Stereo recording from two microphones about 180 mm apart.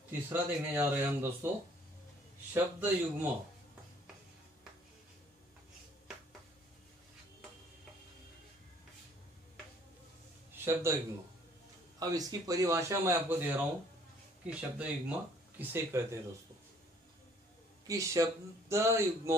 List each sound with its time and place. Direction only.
0.1 s speech: 10° right (ahead or behind)
2.5 s speech: 10° right (ahead or behind)
10.6 s a man's voice: 15° right (ahead or behind)
12.0 s speech: 20° right (ahead or behind)
17.8 s speech: 20° right (ahead or behind)